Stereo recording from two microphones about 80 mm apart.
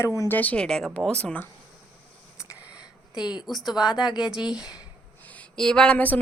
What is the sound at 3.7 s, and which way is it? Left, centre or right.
Speech, left.